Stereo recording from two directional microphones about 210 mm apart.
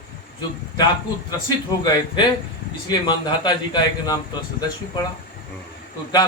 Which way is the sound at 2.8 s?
20° left (ahead or behind).